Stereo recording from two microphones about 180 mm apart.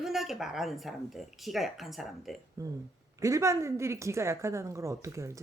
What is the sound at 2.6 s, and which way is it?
Speech, 20° right (ahead or behind).